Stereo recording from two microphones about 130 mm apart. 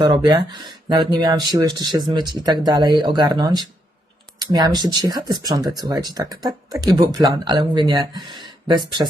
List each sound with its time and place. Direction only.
0.0 s speech: 35° right (ahead or behind)